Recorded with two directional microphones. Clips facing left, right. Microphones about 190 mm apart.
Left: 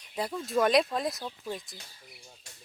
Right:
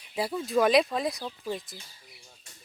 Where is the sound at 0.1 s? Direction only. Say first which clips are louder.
Right 3 dB; 5° right (ahead or behind).